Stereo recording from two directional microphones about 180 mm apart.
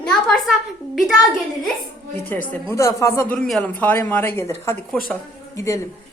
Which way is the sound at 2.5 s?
15° left (ahead or behind).